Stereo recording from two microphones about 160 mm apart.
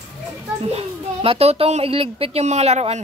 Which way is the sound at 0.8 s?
40° right (ahead or behind).